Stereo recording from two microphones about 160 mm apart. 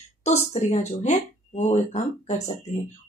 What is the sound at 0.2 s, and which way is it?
Speech, 40° left (ahead or behind).